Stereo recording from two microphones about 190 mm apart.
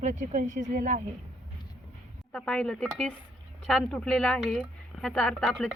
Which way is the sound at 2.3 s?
5° left (ahead or behind).